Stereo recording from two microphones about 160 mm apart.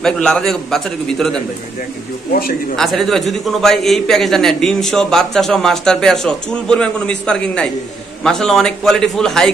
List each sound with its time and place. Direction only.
0.0 s a man's voice: 5° left (ahead or behind)
2.7 s a man's voice: centre (ahead or behind)